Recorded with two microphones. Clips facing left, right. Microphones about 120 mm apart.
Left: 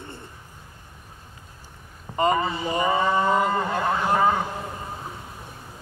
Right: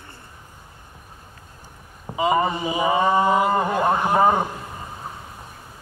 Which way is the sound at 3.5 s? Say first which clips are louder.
Right 4 dB; 20° right (ahead or behind).